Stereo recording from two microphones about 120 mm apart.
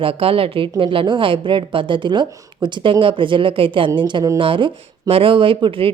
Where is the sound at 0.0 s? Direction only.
50° right (ahead or behind).